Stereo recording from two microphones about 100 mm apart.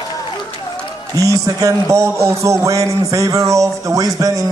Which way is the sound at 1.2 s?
35° right (ahead or behind).